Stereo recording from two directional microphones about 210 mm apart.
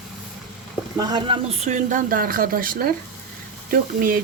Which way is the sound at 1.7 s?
40° right (ahead or behind).